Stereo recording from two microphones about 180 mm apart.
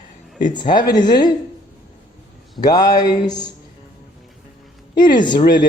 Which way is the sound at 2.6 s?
20° left (ahead or behind).